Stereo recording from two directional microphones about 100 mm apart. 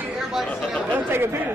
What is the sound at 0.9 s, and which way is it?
Speech, 20° right (ahead or behind).